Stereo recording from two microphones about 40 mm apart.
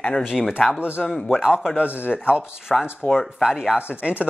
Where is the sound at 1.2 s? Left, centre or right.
Centre.